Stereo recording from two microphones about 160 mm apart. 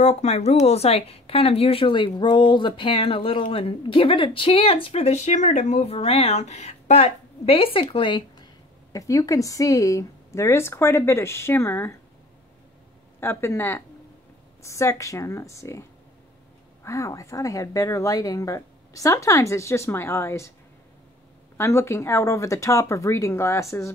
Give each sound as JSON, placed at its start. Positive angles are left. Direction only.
{"t": 0.0, "sound": "speech", "side_deg": 45}
{"t": 13.2, "sound": "a woman's voice", "side_deg": 15}
{"t": 21.5, "sound": "speech", "side_deg": 15}